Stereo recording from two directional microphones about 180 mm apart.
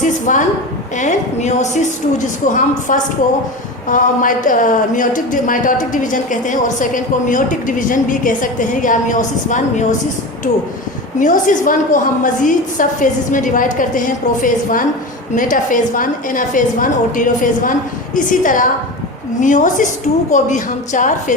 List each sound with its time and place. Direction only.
0.0 s speech: 45° left (ahead or behind)
11.2 s speech: 45° left (ahead or behind)